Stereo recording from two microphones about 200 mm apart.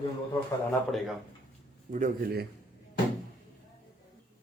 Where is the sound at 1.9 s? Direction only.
40° right (ahead or behind).